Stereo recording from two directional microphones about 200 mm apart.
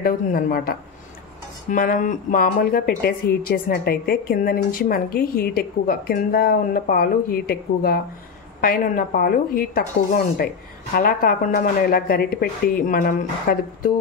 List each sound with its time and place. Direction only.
0.0 s a woman's voice: 45° left (ahead or behind)